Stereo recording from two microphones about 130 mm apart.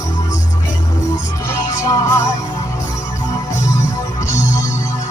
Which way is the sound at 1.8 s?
25° left (ahead or behind).